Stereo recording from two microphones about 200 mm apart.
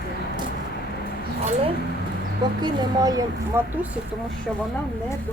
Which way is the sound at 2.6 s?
20° right (ahead or behind).